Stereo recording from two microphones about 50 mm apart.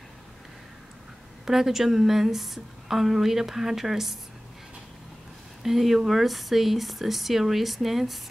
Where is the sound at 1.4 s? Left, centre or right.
Centre.